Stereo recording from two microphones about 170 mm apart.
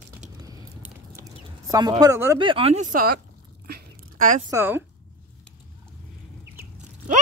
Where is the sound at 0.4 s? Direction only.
20° right (ahead or behind).